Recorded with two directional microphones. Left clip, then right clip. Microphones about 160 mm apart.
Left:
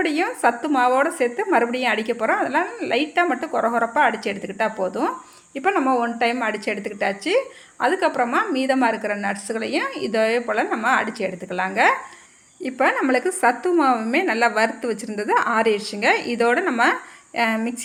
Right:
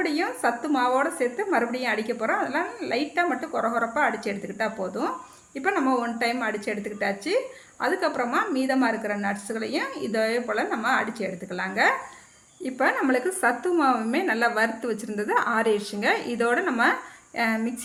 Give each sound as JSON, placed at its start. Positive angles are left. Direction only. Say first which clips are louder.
{"t": 0.0, "sound": "a woman's voice", "louder": "left 5 dB", "side_deg": 25}